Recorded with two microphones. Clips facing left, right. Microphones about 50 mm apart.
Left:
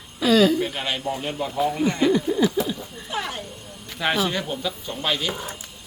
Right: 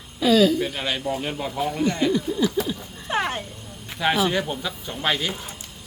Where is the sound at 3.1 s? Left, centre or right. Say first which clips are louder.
Right 5 dB; right.